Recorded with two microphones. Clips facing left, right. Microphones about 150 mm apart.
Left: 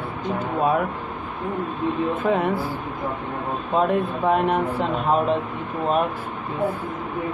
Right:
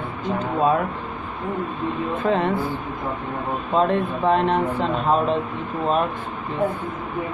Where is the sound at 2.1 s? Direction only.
10° left (ahead or behind).